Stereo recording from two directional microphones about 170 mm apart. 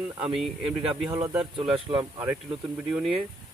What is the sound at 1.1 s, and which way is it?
Speech, 15° right (ahead or behind).